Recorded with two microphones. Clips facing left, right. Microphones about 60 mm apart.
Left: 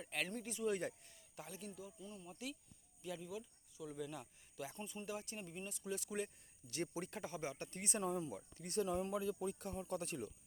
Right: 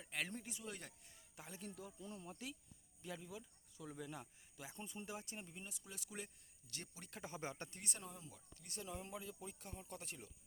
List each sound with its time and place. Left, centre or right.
0.0 s speech: centre
0.3 s speech: centre
0.5 s speech: centre
1.4 s speech: right
2.0 s speech: right
2.3 s speech: right
5.5 s speech: centre
6.8 s speech: left
7.3 s speech: right
7.9 s speech: left
8.8 s speech: left